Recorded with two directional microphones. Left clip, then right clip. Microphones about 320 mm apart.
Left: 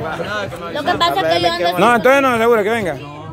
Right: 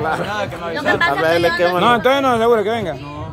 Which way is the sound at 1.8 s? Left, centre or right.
Centre.